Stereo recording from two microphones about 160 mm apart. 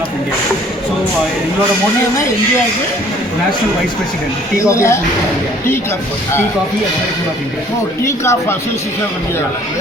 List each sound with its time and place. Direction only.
4.6 s speech: 20° left (ahead or behind)
8.0 s speech: 15° left (ahead or behind)